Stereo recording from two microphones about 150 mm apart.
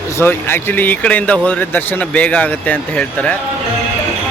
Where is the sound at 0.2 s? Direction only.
15° left (ahead or behind).